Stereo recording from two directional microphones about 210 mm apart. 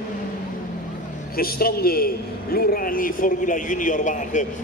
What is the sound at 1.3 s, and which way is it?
A man's voice, 45° left (ahead or behind).